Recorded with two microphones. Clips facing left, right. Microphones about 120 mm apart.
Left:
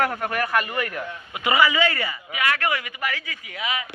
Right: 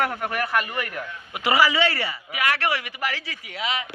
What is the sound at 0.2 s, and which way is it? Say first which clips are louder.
Speech: left 1 dB; 15° right (ahead or behind).